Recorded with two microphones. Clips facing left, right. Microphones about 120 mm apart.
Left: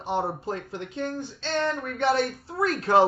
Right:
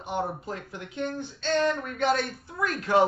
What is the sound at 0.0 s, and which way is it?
Speech, 30° left (ahead or behind).